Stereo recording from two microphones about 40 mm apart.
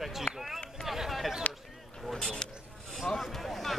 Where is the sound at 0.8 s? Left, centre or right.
Centre.